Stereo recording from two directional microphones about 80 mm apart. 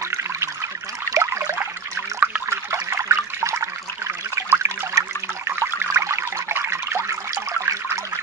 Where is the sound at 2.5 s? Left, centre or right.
Right.